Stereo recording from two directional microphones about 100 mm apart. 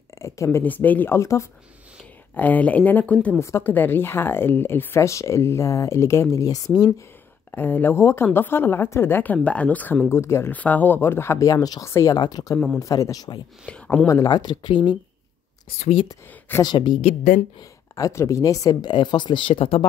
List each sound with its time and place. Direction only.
0.2 s speech: 30° left (ahead or behind)
2.3 s speech: 15° left (ahead or behind)
3.3 s speech: 30° left (ahead or behind)
7.5 s speech: 20° left (ahead or behind)
10.0 s speech: 25° left (ahead or behind)
11.4 s speech: 40° left (ahead or behind)
12.2 s speech: 45° left (ahead or behind)
13.7 s speech: 10° left (ahead or behind)
14.0 s speech: 30° left (ahead or behind)
14.3 s speech: 50° left (ahead or behind)
16.6 s speech: 50° left (ahead or behind)
17.6 s speech: 35° left (ahead or behind); by 19.9 s 70° left (ahead or behind)